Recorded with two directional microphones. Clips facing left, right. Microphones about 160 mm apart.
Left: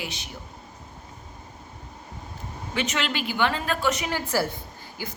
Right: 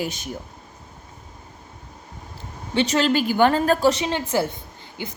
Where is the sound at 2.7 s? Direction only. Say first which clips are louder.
Right 9 dB; 35° right (ahead or behind).